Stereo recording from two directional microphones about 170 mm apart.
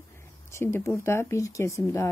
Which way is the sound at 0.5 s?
15° left (ahead or behind).